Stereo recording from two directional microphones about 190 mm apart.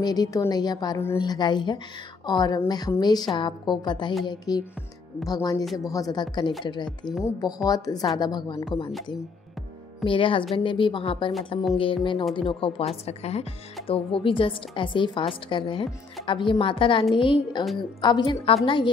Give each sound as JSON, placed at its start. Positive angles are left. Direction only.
{"t": 0.0, "sound": "a woman's voice", "side_deg": 20}
{"t": 10.0, "sound": "a woman's voice", "side_deg": 25}